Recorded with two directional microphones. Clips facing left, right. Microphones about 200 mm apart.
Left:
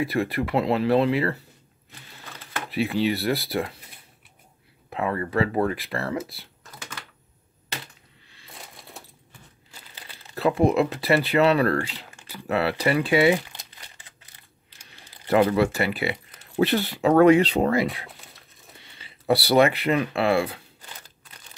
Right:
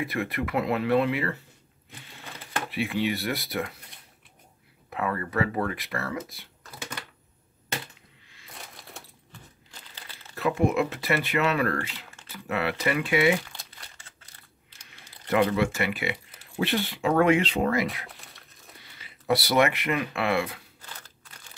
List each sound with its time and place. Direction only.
0.0 s speech: 30° left (ahead or behind)
2.7 s speech: 35° left (ahead or behind)
4.8 s speech: 25° left (ahead or behind)
8.5 s crushing: centre (ahead or behind)
10.3 s speech: 35° left (ahead or behind)
13.5 s crumpling: 15° left (ahead or behind)
14.9 s crumpling: 35° left (ahead or behind)
15.5 s speech: 35° left (ahead or behind)
18.9 s speech: 30° left (ahead or behind)
20.8 s crunch: 15° left (ahead or behind)